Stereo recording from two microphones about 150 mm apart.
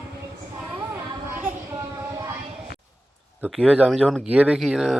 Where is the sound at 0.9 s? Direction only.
15° right (ahead or behind).